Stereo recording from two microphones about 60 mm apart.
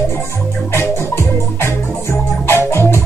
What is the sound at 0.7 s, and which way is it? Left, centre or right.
Music, left.